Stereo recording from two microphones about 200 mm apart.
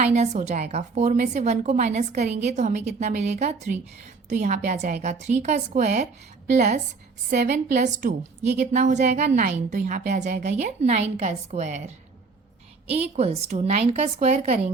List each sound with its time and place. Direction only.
0.0 s a woman's voice: 35° right (ahead or behind)
12.9 s a woman's voice: 30° right (ahead or behind)